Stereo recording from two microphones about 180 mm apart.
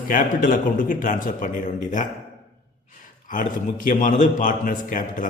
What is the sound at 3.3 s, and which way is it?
Speech, 45° left (ahead or behind).